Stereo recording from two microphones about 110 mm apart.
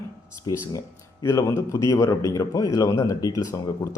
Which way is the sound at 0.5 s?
40° left (ahead or behind).